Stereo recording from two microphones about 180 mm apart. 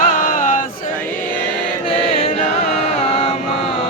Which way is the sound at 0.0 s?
50° left (ahead or behind).